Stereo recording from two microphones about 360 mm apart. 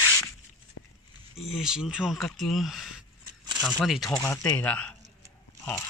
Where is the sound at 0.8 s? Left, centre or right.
Left.